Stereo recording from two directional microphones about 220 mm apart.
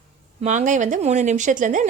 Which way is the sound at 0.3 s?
35° right (ahead or behind).